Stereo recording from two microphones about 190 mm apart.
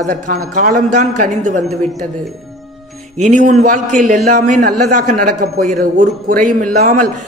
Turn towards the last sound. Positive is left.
turn(degrees=-45)  # may be behind; listen again after turning